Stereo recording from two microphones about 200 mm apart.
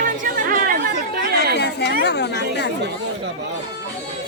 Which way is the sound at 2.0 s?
55° left (ahead or behind).